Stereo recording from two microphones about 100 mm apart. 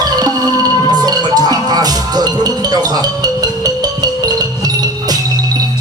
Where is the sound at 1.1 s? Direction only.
40° right (ahead or behind).